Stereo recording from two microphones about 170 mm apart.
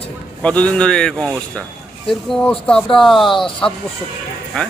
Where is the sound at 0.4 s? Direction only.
5° left (ahead or behind).